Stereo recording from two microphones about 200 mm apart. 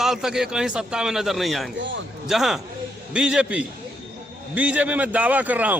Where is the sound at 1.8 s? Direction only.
65° right (ahead or behind).